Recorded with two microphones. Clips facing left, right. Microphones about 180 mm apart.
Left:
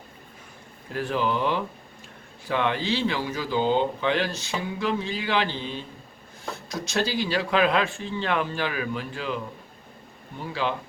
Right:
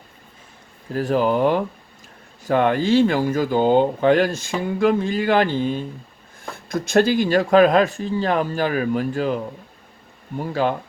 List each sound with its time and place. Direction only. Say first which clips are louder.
0.9 s speech: right 7 dB; 40° right (ahead or behind)